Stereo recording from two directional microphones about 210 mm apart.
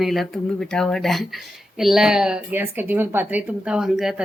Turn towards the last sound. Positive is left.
turn(degrees=0)  # may be behind; listen again after turning